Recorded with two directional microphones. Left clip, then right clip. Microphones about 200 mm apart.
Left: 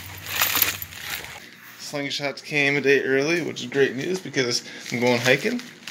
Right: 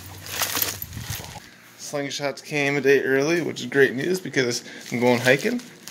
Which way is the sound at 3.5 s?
20° right (ahead or behind).